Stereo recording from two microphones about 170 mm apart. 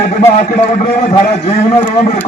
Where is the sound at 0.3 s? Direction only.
45° left (ahead or behind).